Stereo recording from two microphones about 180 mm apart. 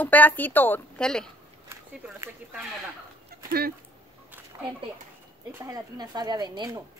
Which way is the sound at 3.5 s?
60° right (ahead or behind).